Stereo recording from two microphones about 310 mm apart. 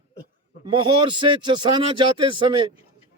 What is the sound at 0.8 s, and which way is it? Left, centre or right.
A man's voice, centre.